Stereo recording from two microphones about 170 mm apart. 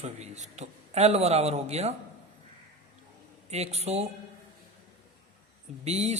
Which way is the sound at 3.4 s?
40° right (ahead or behind).